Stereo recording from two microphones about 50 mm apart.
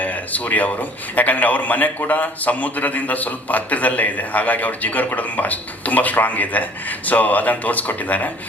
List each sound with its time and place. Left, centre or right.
0.0 s a man's voice: left